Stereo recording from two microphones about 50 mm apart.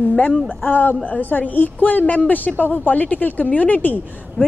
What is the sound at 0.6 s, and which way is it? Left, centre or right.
A man's voice, left.